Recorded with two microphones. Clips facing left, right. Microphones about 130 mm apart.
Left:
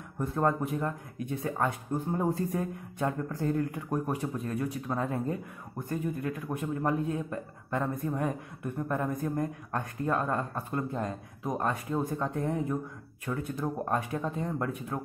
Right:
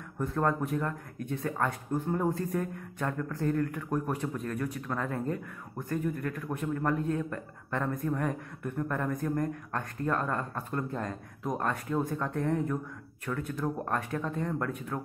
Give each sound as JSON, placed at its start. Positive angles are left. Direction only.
{"t": 0.2, "sound": "speech", "side_deg": 20}
{"t": 6.2, "sound": "speech", "side_deg": 15}